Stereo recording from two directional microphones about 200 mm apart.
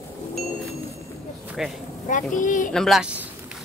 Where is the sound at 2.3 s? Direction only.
40° left (ahead or behind).